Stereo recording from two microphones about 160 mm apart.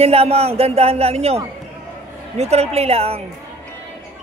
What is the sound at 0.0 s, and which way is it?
A woman's voice, 40° right (ahead or behind).